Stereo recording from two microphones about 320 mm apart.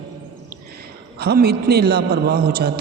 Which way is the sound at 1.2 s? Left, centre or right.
Right.